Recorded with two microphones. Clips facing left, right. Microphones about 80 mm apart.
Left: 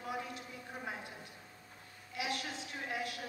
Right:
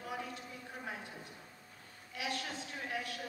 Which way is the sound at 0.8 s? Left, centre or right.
Centre.